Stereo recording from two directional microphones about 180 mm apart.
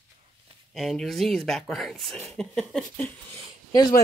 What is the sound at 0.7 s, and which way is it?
Speech, centre (ahead or behind).